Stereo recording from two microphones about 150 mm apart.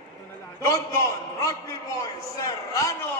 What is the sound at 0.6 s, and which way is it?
A man's voice, 20° left (ahead or behind).